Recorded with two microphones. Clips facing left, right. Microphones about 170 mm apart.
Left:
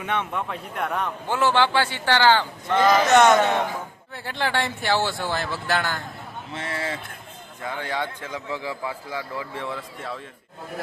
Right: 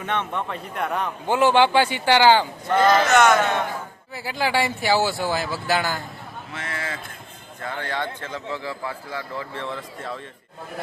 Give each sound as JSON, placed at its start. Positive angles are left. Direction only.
{"t": 0.0, "sound": "speech", "side_deg": 10}
{"t": 1.3, "sound": "speech", "side_deg": -15}
{"t": 3.1, "sound": "speech", "side_deg": 30}
{"t": 3.3, "sound": "speech", "side_deg": 0}
{"t": 6.5, "sound": "speech", "side_deg": 30}
{"t": 7.6, "sound": "a man's voice", "side_deg": 10}